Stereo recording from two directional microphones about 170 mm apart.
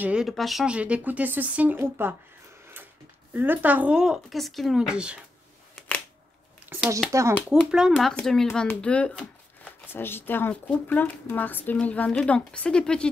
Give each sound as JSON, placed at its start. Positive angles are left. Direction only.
{"t": 0.0, "sound": "speech", "side_deg": -5}
{"t": 3.3, "sound": "speech", "side_deg": -10}
{"t": 6.7, "sound": "speech", "side_deg": -10}
{"t": 7.7, "sound": "speech", "side_deg": 0}